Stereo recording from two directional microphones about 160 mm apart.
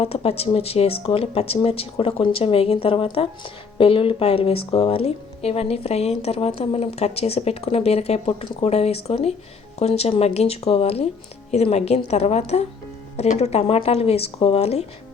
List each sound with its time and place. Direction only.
0.0 s speech: 40° left (ahead or behind)